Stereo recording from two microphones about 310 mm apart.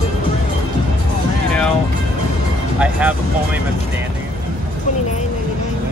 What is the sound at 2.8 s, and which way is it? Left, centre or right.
Music, centre.